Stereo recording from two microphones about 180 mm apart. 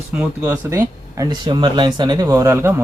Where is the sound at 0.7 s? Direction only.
20° right (ahead or behind).